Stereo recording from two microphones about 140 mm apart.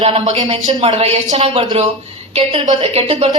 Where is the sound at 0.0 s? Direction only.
45° right (ahead or behind).